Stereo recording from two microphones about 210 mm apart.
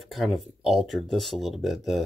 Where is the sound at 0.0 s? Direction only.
Centre (ahead or behind).